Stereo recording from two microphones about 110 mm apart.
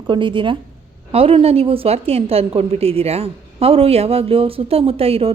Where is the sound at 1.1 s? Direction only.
60° right (ahead or behind).